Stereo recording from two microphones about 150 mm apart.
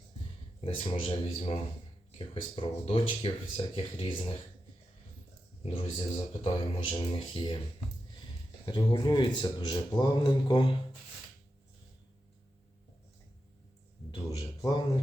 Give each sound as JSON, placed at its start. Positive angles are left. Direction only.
{"t": 0.6, "sound": "speech", "side_deg": 35}
{"t": 5.6, "sound": "speech", "side_deg": 40}
{"t": 8.6, "sound": "speech", "side_deg": 30}
{"t": 14.3, "sound": "a sound", "side_deg": 25}